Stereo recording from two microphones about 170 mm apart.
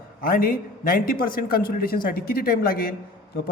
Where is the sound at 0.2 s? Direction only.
55° left (ahead or behind).